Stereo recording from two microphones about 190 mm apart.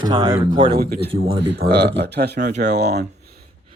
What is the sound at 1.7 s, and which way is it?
Speech, 60° right (ahead or behind).